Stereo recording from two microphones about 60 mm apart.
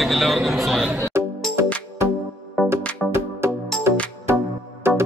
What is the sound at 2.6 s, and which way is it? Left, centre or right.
Music, right.